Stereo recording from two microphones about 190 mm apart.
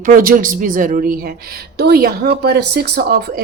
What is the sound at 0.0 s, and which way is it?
A woman's voice, 45° right (ahead or behind).